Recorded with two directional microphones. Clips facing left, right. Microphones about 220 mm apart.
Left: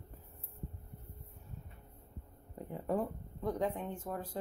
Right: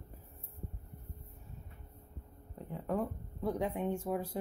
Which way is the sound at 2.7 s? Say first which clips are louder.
Left 1 dB; 10° left (ahead or behind).